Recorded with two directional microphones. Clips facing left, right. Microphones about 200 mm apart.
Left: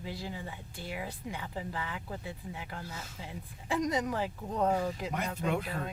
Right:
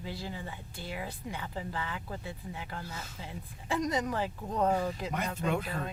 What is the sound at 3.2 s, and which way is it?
Speech, 10° left (ahead or behind).